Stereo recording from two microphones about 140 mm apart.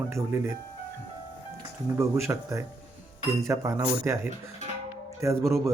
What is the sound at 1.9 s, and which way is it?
Speech, 20° right (ahead or behind).